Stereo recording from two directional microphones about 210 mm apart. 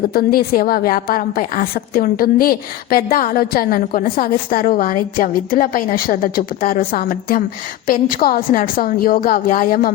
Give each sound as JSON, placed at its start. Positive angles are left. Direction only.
{"t": 0.1, "sound": "a woman's voice", "side_deg": 45}